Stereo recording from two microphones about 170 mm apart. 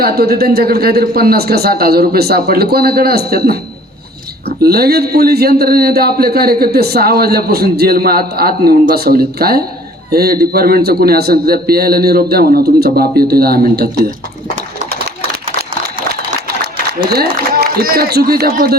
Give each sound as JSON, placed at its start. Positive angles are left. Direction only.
{"t": 0.0, "sound": "a man's voice", "side_deg": -65}
{"t": 4.6, "sound": "a man's voice", "side_deg": -65}
{"t": 17.1, "sound": "a man's voice", "side_deg": -65}